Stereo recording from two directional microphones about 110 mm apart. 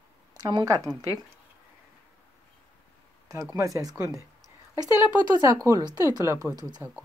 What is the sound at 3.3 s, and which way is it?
Speech, 30° right (ahead or behind).